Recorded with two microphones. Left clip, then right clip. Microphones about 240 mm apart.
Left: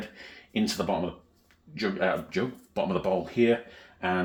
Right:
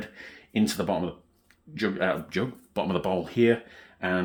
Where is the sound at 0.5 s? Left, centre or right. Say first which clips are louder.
Right 1 dB; right.